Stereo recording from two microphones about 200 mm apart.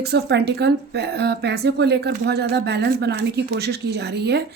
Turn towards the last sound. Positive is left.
turn(degrees=-55)  # may be behind; listen again after turning